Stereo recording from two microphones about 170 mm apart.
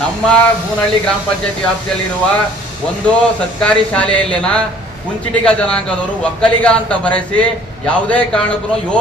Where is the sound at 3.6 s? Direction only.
5° left (ahead or behind).